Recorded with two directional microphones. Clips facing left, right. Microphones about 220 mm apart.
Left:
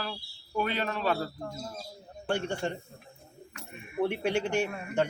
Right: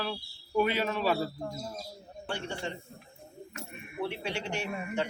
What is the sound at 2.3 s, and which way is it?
Speech, 50° left (ahead or behind).